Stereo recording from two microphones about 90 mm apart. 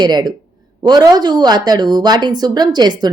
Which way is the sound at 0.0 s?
55° right (ahead or behind).